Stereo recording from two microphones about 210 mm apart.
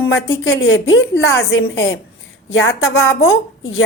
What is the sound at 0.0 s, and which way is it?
A woman's voice, 65° left (ahead or behind).